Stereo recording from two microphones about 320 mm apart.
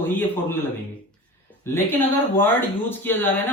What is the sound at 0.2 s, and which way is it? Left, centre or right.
A man's voice, centre.